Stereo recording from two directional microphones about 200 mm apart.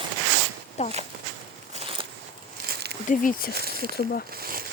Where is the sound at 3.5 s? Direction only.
50° right (ahead or behind).